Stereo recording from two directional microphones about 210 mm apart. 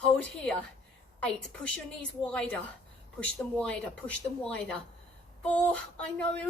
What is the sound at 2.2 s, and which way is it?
A woman's voice, 5° left (ahead or behind).